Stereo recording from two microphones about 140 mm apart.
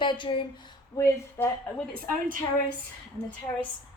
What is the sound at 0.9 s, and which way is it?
Speech, 25° left (ahead or behind).